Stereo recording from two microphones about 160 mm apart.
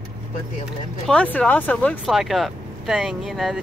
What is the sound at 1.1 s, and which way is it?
Speech, 5° left (ahead or behind).